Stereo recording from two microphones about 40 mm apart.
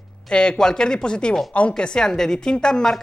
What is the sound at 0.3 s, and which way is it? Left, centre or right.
A woman's voice, left.